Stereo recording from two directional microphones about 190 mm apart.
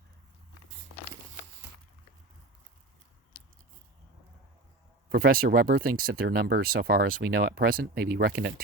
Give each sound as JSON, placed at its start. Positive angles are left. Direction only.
{"t": 5.0, "sound": "speech", "side_deg": -50}